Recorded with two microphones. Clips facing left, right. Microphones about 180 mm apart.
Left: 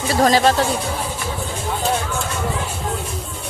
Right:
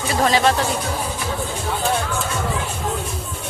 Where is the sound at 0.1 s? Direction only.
35° left (ahead or behind).